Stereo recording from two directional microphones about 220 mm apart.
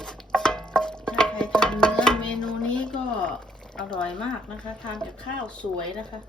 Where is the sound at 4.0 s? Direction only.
5° left (ahead or behind).